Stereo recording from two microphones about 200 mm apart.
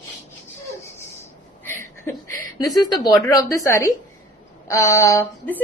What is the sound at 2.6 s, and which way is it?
A woman's voice, 20° left (ahead or behind).